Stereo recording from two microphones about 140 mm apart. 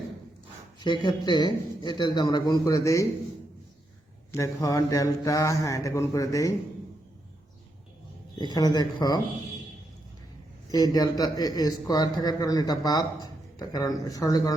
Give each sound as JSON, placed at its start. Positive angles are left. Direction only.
{"t": 1.0, "sound": "a man's voice", "side_deg": 30}
{"t": 4.3, "sound": "a man's voice", "side_deg": 20}
{"t": 8.4, "sound": "a man's voice", "side_deg": 30}
{"t": 10.7, "sound": "a man's voice", "side_deg": 25}